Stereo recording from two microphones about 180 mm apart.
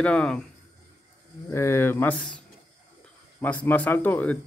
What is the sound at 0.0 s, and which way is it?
Speech, 5° left (ahead or behind).